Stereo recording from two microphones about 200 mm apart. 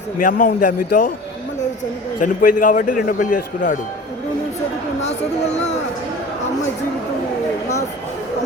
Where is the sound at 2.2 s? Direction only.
40° left (ahead or behind).